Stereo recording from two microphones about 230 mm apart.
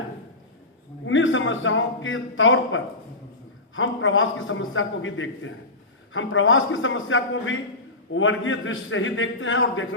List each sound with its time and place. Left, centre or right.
1.0 s a man's voice: left